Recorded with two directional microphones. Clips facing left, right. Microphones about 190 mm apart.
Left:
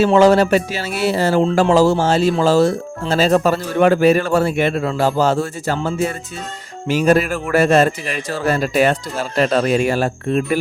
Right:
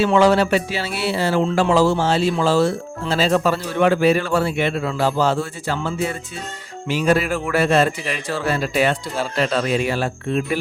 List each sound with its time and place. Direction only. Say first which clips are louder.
0.0 s speech: left 4 dB; 40° left (ahead or behind)